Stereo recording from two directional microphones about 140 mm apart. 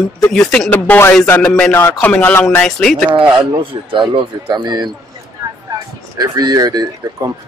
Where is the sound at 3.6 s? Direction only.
40° right (ahead or behind).